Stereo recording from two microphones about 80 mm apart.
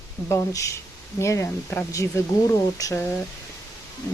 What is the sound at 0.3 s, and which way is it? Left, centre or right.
Speech, left.